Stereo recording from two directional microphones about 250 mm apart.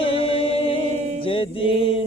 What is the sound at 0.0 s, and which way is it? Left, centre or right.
Music, left.